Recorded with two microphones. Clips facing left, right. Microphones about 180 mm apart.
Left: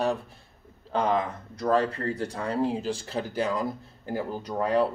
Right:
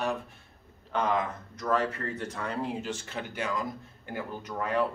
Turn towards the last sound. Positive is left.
turn(degrees=35)  # may be behind; listen again after turning